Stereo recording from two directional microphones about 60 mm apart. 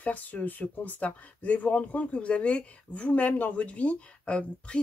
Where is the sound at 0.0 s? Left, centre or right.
Left.